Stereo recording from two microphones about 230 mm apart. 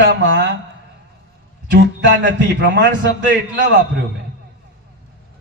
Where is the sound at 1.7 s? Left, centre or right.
Right.